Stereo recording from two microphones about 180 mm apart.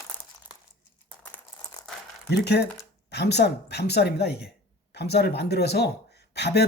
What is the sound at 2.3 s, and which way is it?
Speech, 65° left (ahead or behind).